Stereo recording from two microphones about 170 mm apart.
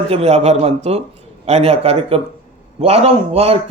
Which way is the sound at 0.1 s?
40° right (ahead or behind).